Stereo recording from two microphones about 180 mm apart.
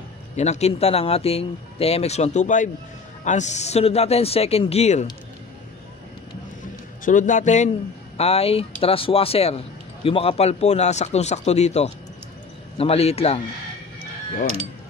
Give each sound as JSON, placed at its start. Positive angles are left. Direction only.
{"t": 0.4, "sound": "speech", "side_deg": 40}
{"t": 7.1, "sound": "a man's voice", "side_deg": 45}